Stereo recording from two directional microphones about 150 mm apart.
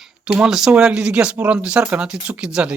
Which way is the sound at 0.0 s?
5° right (ahead or behind).